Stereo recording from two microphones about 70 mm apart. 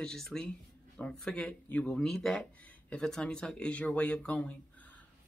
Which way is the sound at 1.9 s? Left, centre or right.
Centre.